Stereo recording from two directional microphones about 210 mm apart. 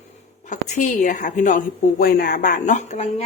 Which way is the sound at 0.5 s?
35° left (ahead or behind).